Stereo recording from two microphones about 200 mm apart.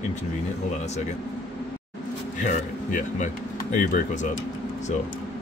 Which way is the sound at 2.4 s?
40° left (ahead or behind).